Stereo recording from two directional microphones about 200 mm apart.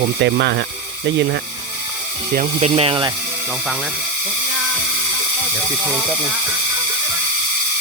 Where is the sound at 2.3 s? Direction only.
30° right (ahead or behind).